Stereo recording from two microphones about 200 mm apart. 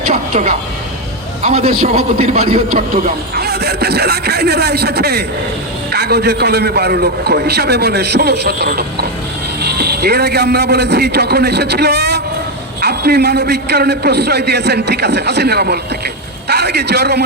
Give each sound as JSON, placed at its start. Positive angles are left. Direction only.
{"t": 0.1, "sound": "vehicle", "side_deg": -40}
{"t": 1.5, "sound": "a man's voice", "side_deg": -30}
{"t": 1.8, "sound": "a man's voice", "side_deg": -45}